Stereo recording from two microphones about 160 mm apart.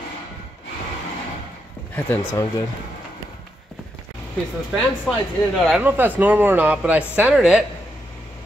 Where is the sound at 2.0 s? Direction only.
10° left (ahead or behind).